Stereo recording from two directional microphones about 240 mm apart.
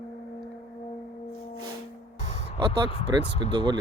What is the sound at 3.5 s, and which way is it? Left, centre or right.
Speech, centre.